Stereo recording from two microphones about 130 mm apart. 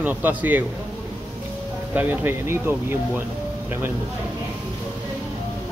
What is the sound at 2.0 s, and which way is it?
Speech, 15° right (ahead or behind).